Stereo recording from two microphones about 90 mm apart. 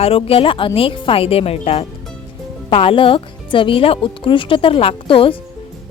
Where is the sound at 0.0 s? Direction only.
90° left.